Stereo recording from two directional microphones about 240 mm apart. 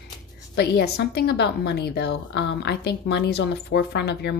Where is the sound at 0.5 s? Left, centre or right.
Left.